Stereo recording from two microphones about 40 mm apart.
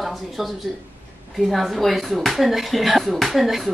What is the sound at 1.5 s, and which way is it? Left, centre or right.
A woman's voice, centre.